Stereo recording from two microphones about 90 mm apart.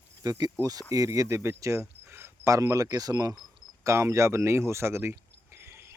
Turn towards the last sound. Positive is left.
turn(degrees=-30)  # may be behind; listen again after turning